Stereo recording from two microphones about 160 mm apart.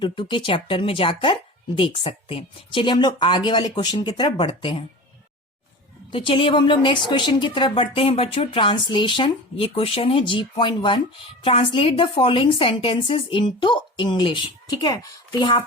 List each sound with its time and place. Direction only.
0.0 s a woman's voice: 30° left (ahead or behind)
6.1 s a woman's voice: 35° left (ahead or behind)